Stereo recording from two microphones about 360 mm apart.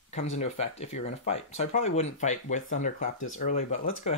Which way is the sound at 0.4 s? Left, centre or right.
Centre.